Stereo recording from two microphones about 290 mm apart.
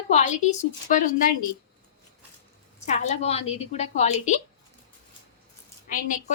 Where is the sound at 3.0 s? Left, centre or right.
Left.